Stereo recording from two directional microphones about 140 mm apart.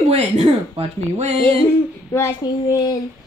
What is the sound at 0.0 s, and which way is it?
Speech, 45° right (ahead or behind).